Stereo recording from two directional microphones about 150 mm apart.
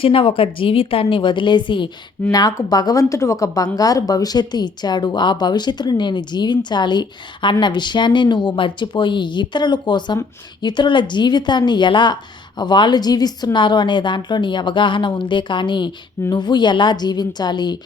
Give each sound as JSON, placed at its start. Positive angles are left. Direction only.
{"t": 0.0, "sound": "a woman's voice", "side_deg": 35}